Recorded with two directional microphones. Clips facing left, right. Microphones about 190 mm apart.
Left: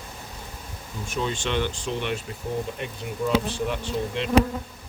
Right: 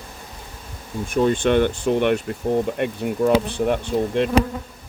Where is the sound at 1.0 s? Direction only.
55° right (ahead or behind).